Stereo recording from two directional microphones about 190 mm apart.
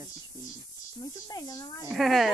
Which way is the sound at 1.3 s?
20° left (ahead or behind).